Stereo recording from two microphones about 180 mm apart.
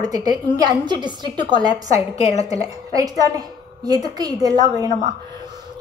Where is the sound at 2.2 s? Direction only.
40° left (ahead or behind).